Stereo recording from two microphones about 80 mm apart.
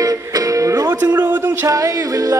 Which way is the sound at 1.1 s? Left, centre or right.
Right.